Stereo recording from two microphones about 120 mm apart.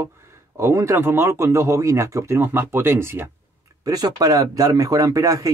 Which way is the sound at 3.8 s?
30° right (ahead or behind).